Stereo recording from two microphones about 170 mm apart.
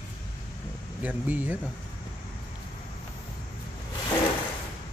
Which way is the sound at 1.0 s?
10° right (ahead or behind).